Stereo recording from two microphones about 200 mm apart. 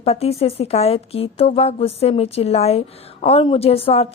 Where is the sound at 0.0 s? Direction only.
30° left (ahead or behind).